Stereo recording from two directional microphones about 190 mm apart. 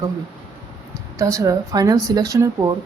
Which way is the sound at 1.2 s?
15° right (ahead or behind).